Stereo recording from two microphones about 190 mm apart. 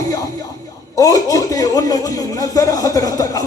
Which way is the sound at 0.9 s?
20° left (ahead or behind).